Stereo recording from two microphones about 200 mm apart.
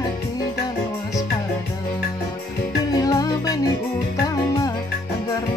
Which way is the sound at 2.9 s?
20° left (ahead or behind).